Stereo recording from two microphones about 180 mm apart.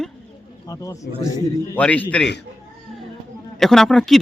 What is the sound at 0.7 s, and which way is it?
A man's voice, 20° left (ahead or behind).